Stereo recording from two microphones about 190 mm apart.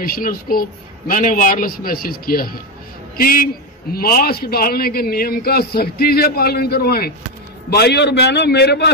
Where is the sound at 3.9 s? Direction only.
50° left (ahead or behind).